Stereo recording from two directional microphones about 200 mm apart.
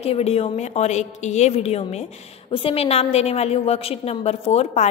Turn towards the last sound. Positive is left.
turn(degrees=30)  # may be behind; listen again after turning